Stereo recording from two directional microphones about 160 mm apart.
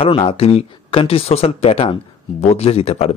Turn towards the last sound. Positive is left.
turn(degrees=40)  # may be behind; listen again after turning